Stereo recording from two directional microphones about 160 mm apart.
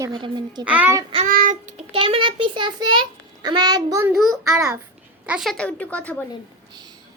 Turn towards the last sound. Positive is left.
turn(degrees=10)  # may be behind; listen again after turning